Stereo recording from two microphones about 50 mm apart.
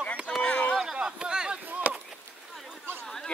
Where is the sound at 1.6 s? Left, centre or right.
Right.